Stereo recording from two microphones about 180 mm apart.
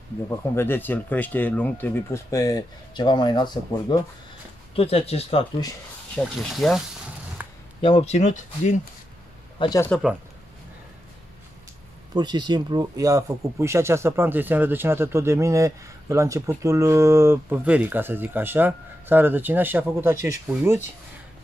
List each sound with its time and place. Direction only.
0.6 s speech: 10° left (ahead or behind); by 5.4 s 35° left (ahead or behind)
6.1 s speech: centre (ahead or behind)
7.4 s a sound: 10° right (ahead or behind)
7.8 s speech: 35° left (ahead or behind)
9.6 s speech: 20° left (ahead or behind)
9.8 s speech: centre (ahead or behind)
12.1 s speech: 25° right (ahead or behind)